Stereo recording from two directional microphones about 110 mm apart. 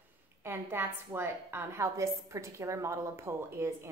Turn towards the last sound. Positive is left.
turn(degrees=-25)  # may be behind; listen again after turning